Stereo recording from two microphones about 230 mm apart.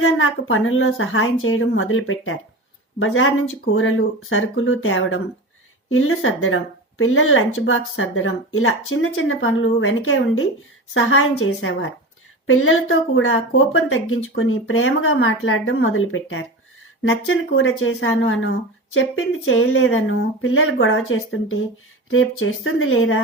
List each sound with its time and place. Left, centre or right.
0.0 s speech: left